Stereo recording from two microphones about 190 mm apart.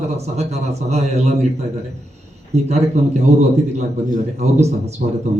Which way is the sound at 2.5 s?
35° right (ahead or behind).